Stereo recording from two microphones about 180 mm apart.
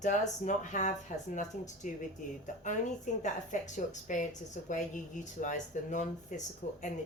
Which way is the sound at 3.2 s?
45° left (ahead or behind).